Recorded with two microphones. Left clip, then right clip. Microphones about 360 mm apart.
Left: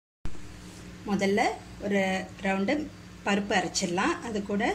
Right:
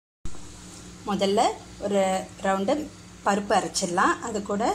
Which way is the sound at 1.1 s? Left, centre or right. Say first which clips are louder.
Right 4 dB; right.